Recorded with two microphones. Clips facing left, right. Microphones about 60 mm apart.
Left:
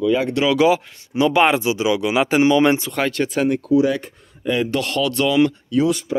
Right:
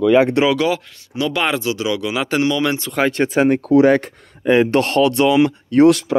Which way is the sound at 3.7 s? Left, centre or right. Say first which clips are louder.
Right 5 dB; right.